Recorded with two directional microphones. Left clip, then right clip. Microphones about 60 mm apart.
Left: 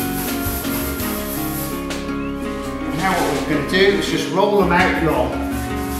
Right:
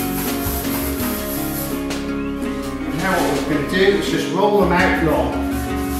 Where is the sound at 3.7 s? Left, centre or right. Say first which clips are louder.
Left 1 dB; left.